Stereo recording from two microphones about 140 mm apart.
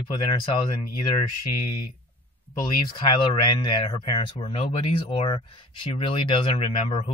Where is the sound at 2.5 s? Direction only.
30° left (ahead or behind).